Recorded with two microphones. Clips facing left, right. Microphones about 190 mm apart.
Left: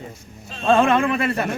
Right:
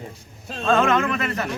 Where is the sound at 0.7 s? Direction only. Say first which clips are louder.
Left 3 dB; 30° left (ahead or behind).